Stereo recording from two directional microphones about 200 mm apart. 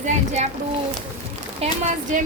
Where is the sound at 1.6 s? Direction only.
30° right (ahead or behind).